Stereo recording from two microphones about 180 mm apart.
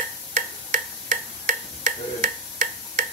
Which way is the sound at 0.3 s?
45° right (ahead or behind).